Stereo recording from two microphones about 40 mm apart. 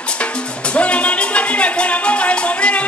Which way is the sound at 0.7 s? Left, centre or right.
Left.